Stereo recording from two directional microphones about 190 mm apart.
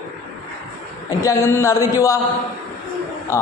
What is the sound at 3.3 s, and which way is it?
Speech, 15° left (ahead or behind).